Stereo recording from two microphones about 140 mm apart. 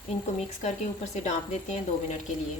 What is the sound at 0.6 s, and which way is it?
A woman's voice, 55° left (ahead or behind).